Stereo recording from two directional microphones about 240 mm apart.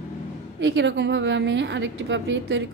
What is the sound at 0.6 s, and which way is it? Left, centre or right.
A woman's voice, right.